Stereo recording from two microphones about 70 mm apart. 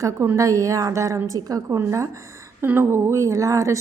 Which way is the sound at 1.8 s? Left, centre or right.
Right.